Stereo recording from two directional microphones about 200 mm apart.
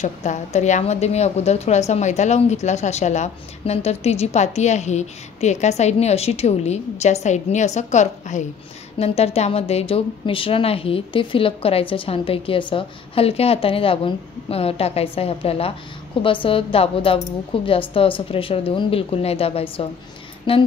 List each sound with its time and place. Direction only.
0.0 s a woman's voice: 35° left (ahead or behind)